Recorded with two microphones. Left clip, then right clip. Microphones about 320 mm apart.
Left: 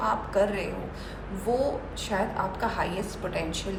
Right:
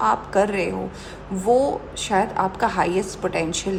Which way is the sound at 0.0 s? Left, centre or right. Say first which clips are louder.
Right 6 dB; right.